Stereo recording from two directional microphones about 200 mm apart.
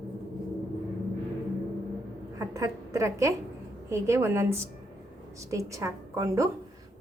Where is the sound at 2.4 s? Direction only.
15° right (ahead or behind).